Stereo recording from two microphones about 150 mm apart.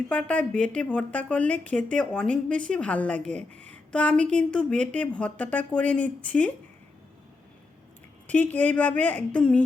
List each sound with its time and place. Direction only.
0.1 s a woman's voice: 10° left (ahead or behind)
8.3 s a woman's voice: 10° left (ahead or behind)